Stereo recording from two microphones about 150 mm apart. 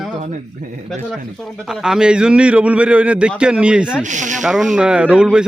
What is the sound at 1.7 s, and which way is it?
A man's voice, 5° right (ahead or behind).